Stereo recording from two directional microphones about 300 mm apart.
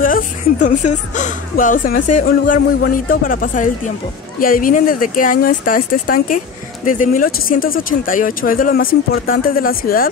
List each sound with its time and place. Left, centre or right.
0.0 s speech: left